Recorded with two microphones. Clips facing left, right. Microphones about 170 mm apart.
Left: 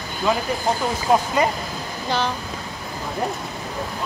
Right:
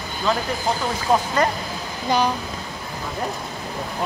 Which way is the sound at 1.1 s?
10° left (ahead or behind).